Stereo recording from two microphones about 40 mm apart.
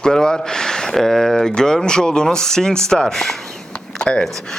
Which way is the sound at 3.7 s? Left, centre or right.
Left.